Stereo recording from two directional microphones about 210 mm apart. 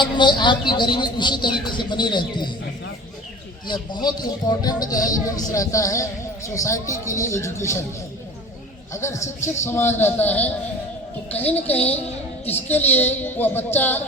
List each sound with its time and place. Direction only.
0.0 s a woman's voice: 20° left (ahead or behind)
3.7 s a woman's voice: 20° left (ahead or behind)
8.9 s a woman's voice: 15° left (ahead or behind)